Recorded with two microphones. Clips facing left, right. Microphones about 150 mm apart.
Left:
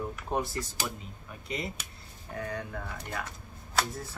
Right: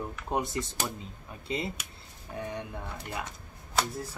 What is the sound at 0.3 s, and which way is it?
Speech, 20° right (ahead or behind).